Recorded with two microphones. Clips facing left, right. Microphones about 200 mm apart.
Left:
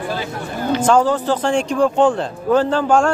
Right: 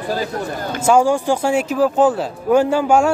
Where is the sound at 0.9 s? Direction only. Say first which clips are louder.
Right 2 dB; 10° right (ahead or behind).